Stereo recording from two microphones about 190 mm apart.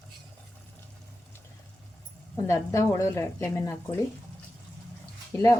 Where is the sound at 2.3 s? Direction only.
15° left (ahead or behind).